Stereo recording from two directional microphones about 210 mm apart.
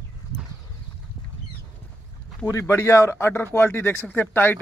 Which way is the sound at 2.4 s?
15° left (ahead or behind).